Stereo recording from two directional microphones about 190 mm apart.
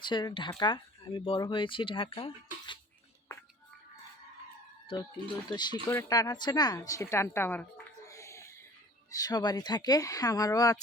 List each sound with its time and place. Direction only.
0.0 s speech: 25° left (ahead or behind)
5.5 s speech: 20° left (ahead or behind)